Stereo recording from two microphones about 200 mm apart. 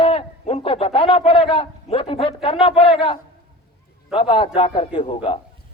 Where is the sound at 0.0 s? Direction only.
30° left (ahead or behind).